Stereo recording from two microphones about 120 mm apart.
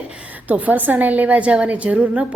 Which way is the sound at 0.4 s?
15° right (ahead or behind).